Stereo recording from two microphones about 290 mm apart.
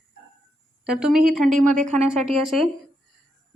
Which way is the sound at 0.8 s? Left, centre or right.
Centre.